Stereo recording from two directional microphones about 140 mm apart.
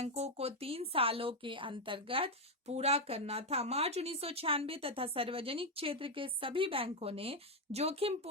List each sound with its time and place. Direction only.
0.0 s a woman's voice: 45° right (ahead or behind)